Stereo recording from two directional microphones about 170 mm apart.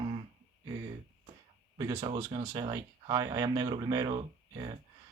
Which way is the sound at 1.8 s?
30° right (ahead or behind).